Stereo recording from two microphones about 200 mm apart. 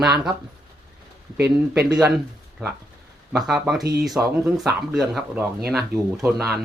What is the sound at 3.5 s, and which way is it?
Speech, centre (ahead or behind).